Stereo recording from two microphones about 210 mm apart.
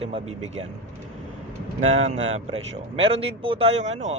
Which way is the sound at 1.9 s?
30° right (ahead or behind).